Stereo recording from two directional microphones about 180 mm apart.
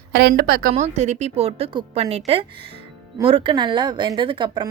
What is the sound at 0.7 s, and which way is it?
A woman's voice, 40° right (ahead or behind).